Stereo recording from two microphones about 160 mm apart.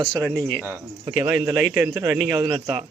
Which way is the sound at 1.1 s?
10° right (ahead or behind).